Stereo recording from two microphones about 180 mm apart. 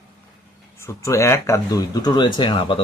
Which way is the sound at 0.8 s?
15° left (ahead or behind).